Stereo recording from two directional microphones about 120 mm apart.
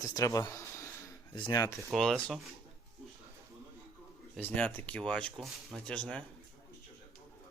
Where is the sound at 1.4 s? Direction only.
45° left (ahead or behind).